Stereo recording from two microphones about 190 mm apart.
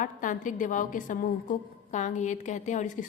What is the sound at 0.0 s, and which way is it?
A woman's voice, 45° left (ahead or behind).